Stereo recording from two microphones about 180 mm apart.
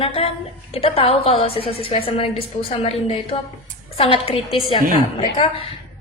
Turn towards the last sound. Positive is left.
turn(degrees=30)  # may be behind; listen again after turning